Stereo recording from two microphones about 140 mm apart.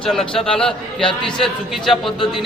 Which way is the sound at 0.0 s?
5° left (ahead or behind).